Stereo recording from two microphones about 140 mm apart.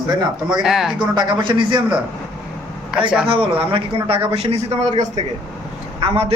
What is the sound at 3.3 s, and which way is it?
Speech, 40° right (ahead or behind).